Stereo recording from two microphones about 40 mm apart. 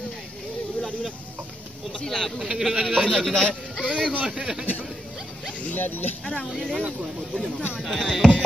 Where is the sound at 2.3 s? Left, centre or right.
Right.